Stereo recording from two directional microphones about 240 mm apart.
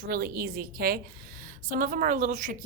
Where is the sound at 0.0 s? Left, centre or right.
Right.